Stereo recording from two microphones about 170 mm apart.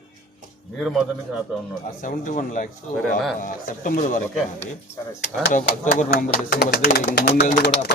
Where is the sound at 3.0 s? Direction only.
Centre (ahead or behind).